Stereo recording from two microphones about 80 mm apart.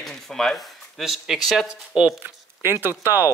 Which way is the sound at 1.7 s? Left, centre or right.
Centre.